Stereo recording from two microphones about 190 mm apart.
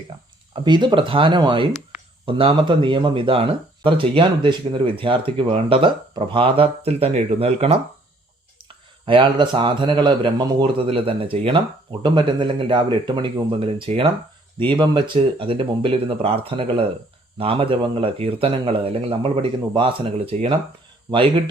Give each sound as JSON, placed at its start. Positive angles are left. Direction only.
{"t": 0.1, "sound": "speech", "side_deg": -25}